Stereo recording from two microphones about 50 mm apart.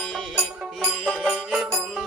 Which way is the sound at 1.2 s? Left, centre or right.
Centre.